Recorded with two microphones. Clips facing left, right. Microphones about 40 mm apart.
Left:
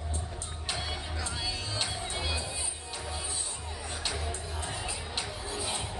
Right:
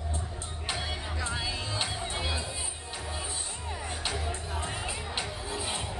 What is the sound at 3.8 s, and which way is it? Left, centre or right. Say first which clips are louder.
Music: right 1 dB; right.